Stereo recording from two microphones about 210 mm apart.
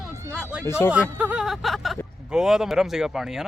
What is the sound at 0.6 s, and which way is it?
Speech, 10° left (ahead or behind).